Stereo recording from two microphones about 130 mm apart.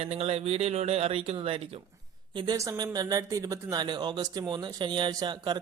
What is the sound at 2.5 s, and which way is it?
Speech, 25° right (ahead or behind).